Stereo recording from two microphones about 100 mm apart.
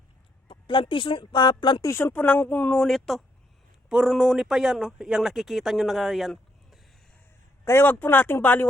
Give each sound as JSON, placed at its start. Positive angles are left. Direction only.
{"t": 0.4, "sound": "speech", "side_deg": 55}
{"t": 1.8, "sound": "speech", "side_deg": 30}
{"t": 2.1, "sound": "speech", "side_deg": 15}
{"t": 2.7, "sound": "speech", "side_deg": 5}
{"t": 7.6, "sound": "speech", "side_deg": 25}